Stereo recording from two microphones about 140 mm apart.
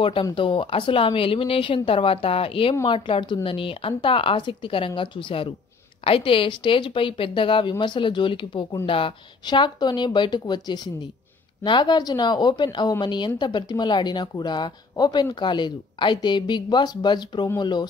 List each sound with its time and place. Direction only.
0.0 s speech: 35° left (ahead or behind)